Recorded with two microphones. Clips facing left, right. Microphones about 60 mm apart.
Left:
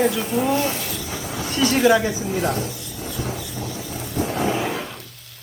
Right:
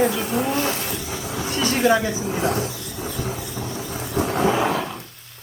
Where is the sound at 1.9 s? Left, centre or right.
Right.